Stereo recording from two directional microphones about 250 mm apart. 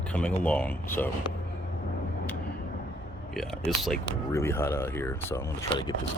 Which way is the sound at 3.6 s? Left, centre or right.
Centre.